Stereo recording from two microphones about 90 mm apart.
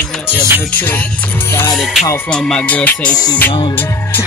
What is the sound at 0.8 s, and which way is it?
Speech, 20° left (ahead or behind).